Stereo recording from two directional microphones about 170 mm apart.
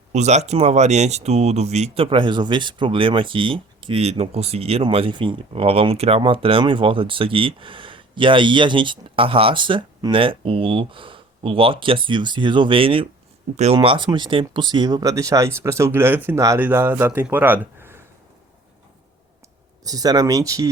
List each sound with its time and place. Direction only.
0.1 s speech: 40° right (ahead or behind); by 18.0 s 15° right (ahead or behind)
19.8 s speech: 20° right (ahead or behind)